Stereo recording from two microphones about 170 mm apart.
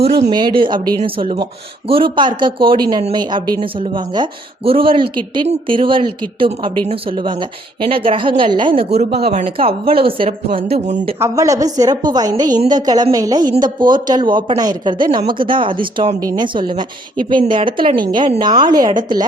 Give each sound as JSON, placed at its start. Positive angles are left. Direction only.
{"t": 0.3, "sound": "a woman's voice", "side_deg": -25}
{"t": 9.0, "sound": "speech", "side_deg": -70}
{"t": 9.3, "sound": "a woman's voice", "side_deg": -40}
{"t": 11.2, "sound": "a woman's voice", "side_deg": -20}